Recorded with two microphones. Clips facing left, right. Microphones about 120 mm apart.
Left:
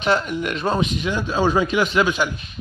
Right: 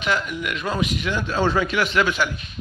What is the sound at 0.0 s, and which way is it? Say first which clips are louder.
Speech: left 4 dB; 30° left (ahead or behind).